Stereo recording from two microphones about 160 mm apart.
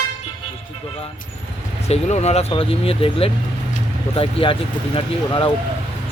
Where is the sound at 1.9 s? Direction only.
40° left (ahead or behind).